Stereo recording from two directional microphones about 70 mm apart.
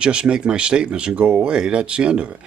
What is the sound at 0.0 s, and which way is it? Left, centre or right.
A man's voice, centre.